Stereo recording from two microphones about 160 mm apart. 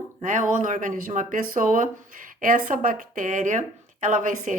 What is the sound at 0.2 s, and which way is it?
Speech, 55° right (ahead or behind).